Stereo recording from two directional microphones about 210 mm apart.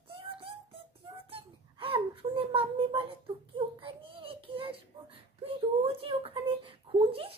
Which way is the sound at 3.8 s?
25° right (ahead or behind).